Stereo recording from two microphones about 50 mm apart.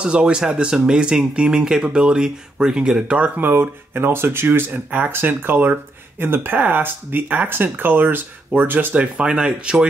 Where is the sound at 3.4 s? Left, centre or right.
Right.